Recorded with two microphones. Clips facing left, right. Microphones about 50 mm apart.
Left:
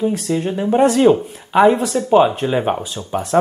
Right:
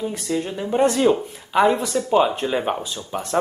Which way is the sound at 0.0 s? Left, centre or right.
Left.